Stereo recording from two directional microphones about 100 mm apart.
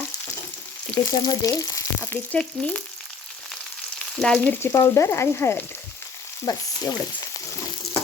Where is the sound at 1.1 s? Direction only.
40° left (ahead or behind).